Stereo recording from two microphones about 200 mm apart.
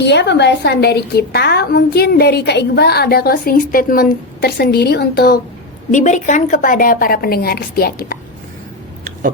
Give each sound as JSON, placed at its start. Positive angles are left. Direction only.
{"t": 0.0, "sound": "a woman's voice", "side_deg": 60}
{"t": 5.9, "sound": "a woman's voice", "side_deg": 40}